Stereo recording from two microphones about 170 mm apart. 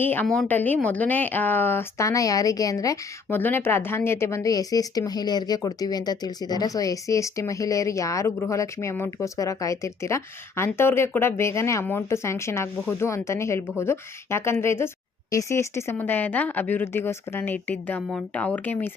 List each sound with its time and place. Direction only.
0.0 s a woman's voice: 10° left (ahead or behind)